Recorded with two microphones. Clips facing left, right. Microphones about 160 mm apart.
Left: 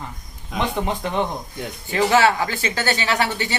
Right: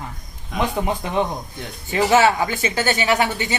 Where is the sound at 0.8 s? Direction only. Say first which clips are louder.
Right 1 dB; 15° right (ahead or behind).